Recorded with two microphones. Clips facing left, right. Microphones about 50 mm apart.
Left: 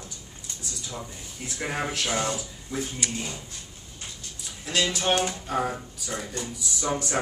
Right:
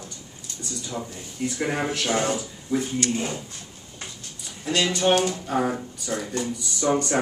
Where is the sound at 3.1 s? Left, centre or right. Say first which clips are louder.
Right 6 dB; right.